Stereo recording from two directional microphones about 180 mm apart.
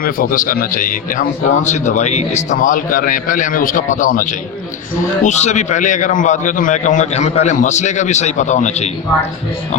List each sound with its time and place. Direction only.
0.0 s a man's voice: 50° left (ahead or behind)